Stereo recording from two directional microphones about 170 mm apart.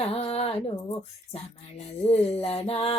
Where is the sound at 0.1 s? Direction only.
35° left (ahead or behind).